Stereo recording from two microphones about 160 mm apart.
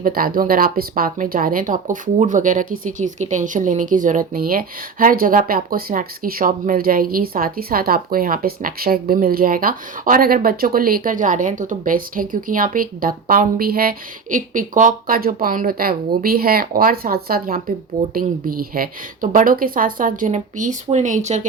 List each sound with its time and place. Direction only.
0.0 s speech: 65° right (ahead or behind); by 21.4 s 50° right (ahead or behind)